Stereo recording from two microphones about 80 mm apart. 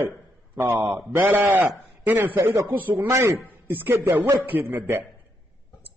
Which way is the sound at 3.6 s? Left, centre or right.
Right.